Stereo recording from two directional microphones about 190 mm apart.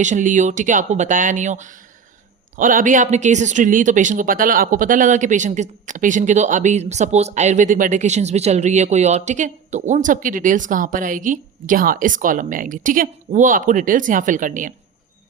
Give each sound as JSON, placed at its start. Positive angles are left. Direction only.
{"t": 0.0, "sound": "speech", "side_deg": -40}